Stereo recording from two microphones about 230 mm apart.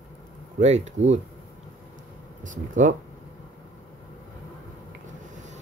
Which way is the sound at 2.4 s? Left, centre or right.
Right.